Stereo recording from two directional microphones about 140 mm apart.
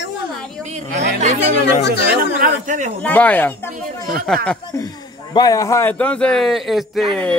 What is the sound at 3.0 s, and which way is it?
A man's voice, 10° left (ahead or behind).